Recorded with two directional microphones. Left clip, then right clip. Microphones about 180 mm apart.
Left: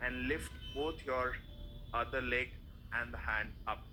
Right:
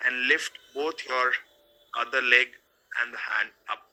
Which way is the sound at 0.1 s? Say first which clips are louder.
Right 15 dB; 30° right (ahead or behind).